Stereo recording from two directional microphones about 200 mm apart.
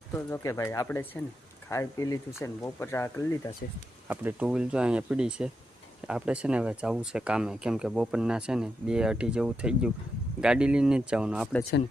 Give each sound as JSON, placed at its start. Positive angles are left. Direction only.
{"t": 0.1, "sound": "speech", "side_deg": 10}
{"t": 4.1, "sound": "speech", "side_deg": -10}